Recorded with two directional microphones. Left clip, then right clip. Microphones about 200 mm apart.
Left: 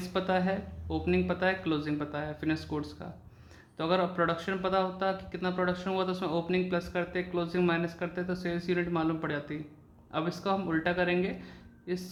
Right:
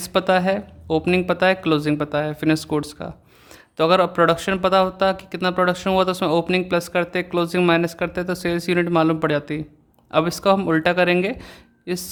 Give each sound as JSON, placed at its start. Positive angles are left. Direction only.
{"t": 0.0, "sound": "speech", "side_deg": -60}